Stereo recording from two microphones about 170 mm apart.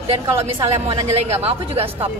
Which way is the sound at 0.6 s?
30° right (ahead or behind).